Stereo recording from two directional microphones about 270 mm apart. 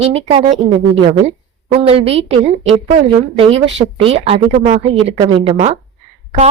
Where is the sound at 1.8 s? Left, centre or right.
Right.